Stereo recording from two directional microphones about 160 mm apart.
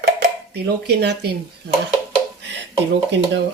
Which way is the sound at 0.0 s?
80° right.